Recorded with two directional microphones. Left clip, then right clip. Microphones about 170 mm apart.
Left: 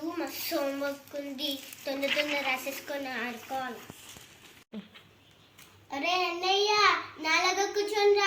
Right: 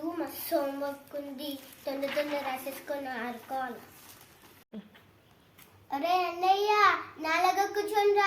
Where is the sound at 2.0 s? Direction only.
5° right (ahead or behind).